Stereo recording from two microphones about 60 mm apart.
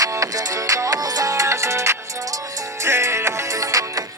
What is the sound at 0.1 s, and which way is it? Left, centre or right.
Music, right.